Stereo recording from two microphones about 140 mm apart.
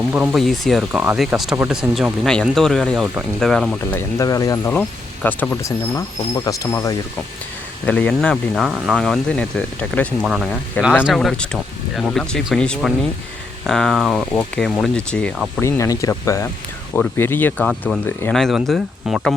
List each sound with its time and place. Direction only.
0.1 s speech: 10° right (ahead or behind)
0.3 s speech: centre (ahead or behind)
4.2 s speech: 25° left (ahead or behind)
4.7 s speech: 10° left (ahead or behind)
7.9 s speech: 10° left (ahead or behind)
15.6 s speech: 25° left (ahead or behind)
17.7 s speech: 5° left (ahead or behind)
18.0 s speech: 15° left (ahead or behind)
18.3 s speech: centre (ahead or behind)